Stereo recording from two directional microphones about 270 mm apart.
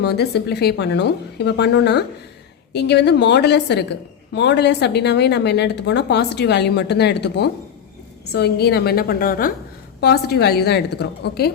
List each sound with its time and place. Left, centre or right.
0.0 s a woman's voice: left